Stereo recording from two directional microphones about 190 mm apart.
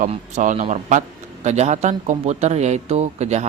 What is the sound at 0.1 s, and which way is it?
Speech, 40° right (ahead or behind).